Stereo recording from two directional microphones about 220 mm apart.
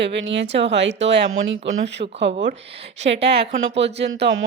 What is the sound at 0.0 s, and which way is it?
Speech, 55° right (ahead or behind).